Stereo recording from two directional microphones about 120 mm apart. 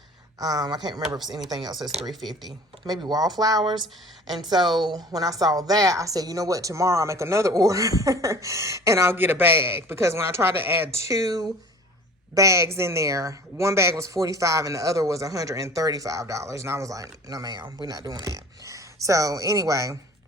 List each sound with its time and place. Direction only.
0.3 s speech: 30° right (ahead or behind)
2.8 s speech: 35° right (ahead or behind)
4.6 s a woman's voice: centre (ahead or behind)
4.9 s a woman's voice: 30° right (ahead or behind)